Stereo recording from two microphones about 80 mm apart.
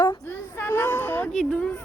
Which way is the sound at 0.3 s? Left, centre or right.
Left.